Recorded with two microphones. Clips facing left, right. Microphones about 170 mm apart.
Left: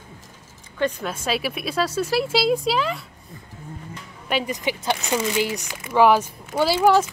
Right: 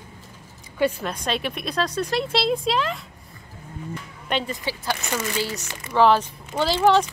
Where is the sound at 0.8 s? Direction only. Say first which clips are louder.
Right 1 dB; centre (ahead or behind).